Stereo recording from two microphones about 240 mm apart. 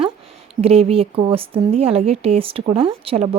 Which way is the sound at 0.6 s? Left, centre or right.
Right.